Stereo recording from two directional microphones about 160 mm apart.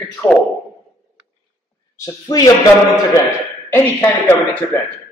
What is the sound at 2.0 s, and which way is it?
Speech, 25° left (ahead or behind).